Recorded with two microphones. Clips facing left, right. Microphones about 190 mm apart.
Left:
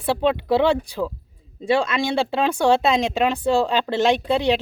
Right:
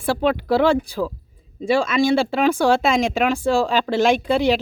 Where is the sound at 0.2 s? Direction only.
20° left (ahead or behind).